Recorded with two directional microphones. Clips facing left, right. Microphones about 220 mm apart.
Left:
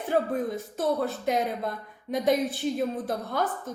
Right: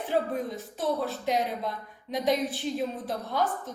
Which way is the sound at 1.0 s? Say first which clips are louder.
Left 2 dB; 50° left (ahead or behind).